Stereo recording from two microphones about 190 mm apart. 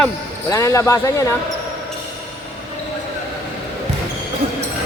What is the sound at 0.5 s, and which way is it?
Speech, 15° left (ahead or behind).